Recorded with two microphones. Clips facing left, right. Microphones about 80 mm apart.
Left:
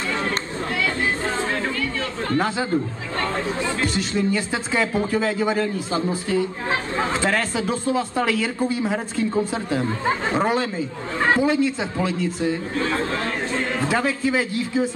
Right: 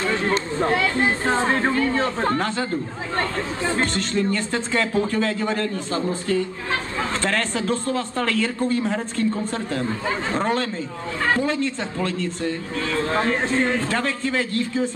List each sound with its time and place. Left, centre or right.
0.6 s chatter: right
3.8 s speech: centre
13.7 s speech: centre